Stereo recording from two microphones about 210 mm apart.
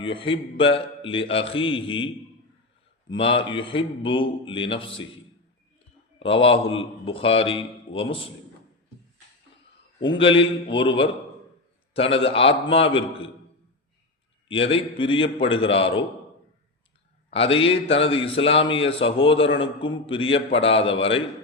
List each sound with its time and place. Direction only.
0.0 s a man's voice: 25° left (ahead or behind)
3.1 s a man's voice: 25° left (ahead or behind)
6.1 s a man's voice: 25° left (ahead or behind)
10.2 s a man's voice: 25° left (ahead or behind)
14.4 s a man's voice: 25° left (ahead or behind)
17.3 s a man's voice: 25° left (ahead or behind)